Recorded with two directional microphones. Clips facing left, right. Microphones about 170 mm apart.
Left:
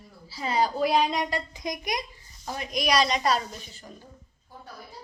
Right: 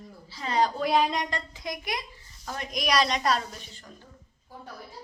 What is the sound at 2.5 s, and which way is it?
Speech, centre (ahead or behind).